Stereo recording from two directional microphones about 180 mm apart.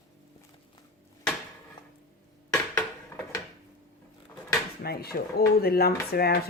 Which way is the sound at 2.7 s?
15° left (ahead or behind).